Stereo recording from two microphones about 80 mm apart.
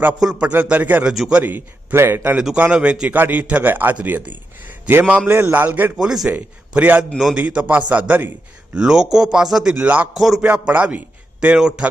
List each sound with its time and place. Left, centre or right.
0.2 s a man's voice: centre
0.4 s a man's voice: centre
2.6 s a man's voice: centre
6.0 s a man's voice: centre
6.3 s a man's voice: right
8.7 s a man's voice: centre
10.2 s a man's voice: centre
10.4 s a man's voice: right